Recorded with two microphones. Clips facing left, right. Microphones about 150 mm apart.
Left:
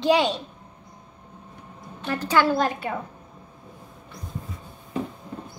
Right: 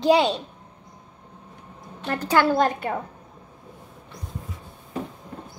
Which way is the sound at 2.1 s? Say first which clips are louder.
Right 1 dB; 40° right (ahead or behind).